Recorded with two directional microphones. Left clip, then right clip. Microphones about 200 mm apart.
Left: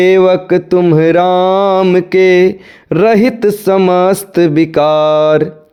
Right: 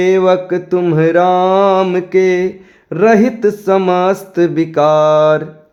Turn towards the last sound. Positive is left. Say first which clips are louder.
# left 1 dB
turn(degrees=35)  # may be behind; listen again after turning